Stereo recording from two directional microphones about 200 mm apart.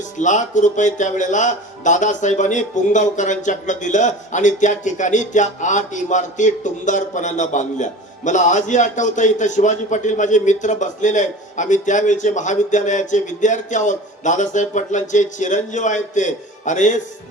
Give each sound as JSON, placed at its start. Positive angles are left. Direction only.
{"t": 0.2, "sound": "speech", "side_deg": 40}